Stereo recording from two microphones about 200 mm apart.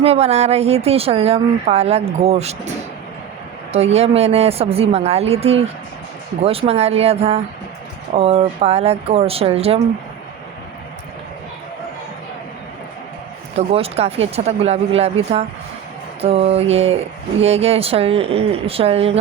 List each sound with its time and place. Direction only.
0.0 s speech: 30° right (ahead or behind)
3.7 s speech: 30° right (ahead or behind)
13.7 s speech: 30° right (ahead or behind)
16.2 s speech: 30° right (ahead or behind)